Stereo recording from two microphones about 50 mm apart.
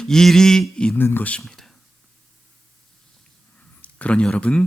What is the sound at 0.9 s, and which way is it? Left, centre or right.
Speech, left.